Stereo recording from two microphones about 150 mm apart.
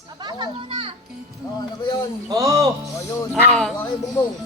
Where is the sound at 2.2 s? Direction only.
20° right (ahead or behind).